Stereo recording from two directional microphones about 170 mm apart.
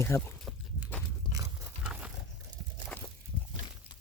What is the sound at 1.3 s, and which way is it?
Crunch, 20° right (ahead or behind).